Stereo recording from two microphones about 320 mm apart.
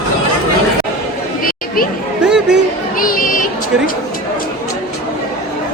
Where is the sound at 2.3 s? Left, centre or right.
Centre.